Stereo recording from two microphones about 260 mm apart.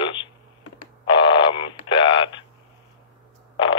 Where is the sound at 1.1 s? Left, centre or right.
Centre.